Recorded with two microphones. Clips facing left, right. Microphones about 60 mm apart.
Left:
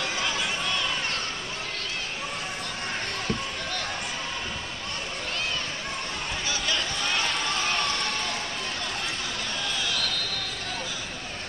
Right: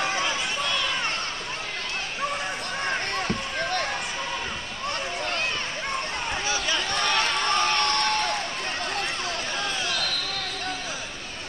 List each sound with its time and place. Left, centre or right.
6.9 s run: right